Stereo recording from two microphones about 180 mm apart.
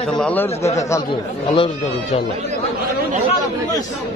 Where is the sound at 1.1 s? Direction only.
30° left (ahead or behind).